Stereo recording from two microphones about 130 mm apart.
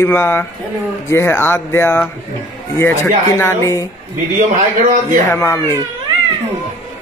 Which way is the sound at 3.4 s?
20° left (ahead or behind).